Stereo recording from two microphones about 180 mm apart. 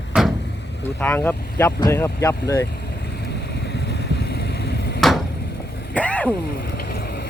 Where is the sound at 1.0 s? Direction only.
10° left (ahead or behind).